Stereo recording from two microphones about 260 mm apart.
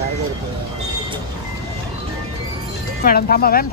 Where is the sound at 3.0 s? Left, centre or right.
Left.